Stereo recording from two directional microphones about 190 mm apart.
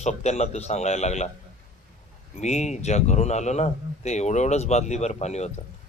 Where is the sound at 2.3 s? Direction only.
35° left (ahead or behind).